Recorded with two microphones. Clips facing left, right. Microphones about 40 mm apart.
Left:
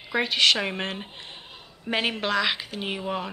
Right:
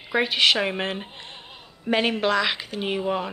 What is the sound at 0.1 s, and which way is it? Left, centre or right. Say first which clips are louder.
Speech: right 1 dB; centre.